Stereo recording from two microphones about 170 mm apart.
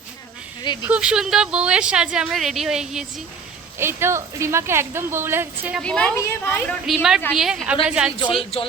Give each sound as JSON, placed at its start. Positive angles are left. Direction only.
{"t": 0.6, "sound": "speech", "side_deg": 25}
{"t": 0.9, "sound": "a woman's voice", "side_deg": -5}
{"t": 3.8, "sound": "a woman's voice", "side_deg": -15}
{"t": 5.7, "sound": "a woman's voice", "side_deg": 5}
{"t": 6.8, "sound": "a woman's voice", "side_deg": -5}
{"t": 8.3, "sound": "speech", "side_deg": 35}